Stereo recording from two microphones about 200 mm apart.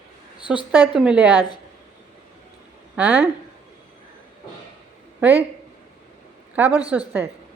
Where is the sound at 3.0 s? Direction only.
10° right (ahead or behind).